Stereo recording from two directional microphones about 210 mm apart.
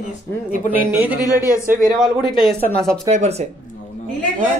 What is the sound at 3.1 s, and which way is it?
Speech, 30° right (ahead or behind).